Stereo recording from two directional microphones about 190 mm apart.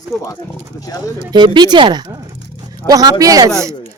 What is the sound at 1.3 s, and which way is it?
Speech, 25° right (ahead or behind).